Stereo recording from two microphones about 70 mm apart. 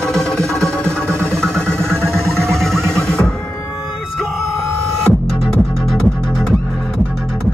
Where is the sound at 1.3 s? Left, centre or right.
Centre.